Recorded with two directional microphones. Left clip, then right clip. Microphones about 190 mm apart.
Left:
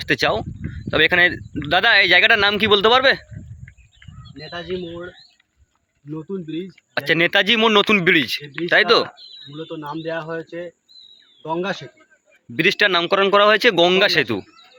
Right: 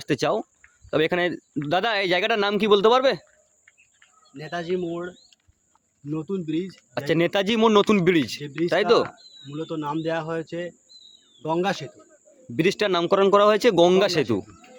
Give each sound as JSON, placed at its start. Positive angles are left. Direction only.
{"t": 0.0, "sound": "speech", "side_deg": -10}
{"t": 4.4, "sound": "speech", "side_deg": -25}
{"t": 6.9, "sound": "speech", "side_deg": -15}
{"t": 9.8, "sound": "speech", "side_deg": -20}
{"t": 12.5, "sound": "speech", "side_deg": -10}